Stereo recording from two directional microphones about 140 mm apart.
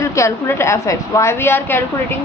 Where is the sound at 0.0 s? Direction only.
20° left (ahead or behind).